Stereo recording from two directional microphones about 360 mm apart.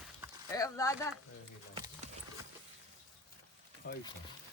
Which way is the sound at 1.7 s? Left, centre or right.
Centre.